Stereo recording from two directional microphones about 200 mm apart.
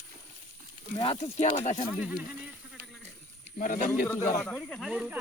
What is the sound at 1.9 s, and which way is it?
Speech, 5° right (ahead or behind).